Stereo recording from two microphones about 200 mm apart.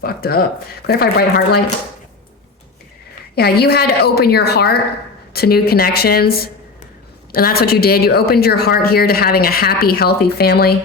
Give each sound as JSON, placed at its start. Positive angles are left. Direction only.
{"t": 0.0, "sound": "a woman's voice", "side_deg": 50}
{"t": 3.3, "sound": "a woman's voice", "side_deg": 50}